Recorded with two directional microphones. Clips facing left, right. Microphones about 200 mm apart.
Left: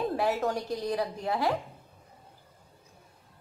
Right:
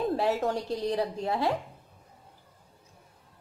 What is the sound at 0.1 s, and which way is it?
A woman's voice, 30° right (ahead or behind).